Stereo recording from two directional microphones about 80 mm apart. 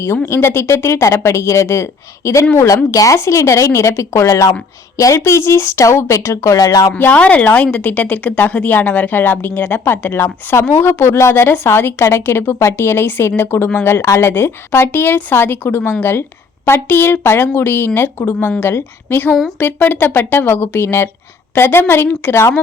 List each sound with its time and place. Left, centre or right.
0.3 s speech: left
7.0 s a woman's voice: centre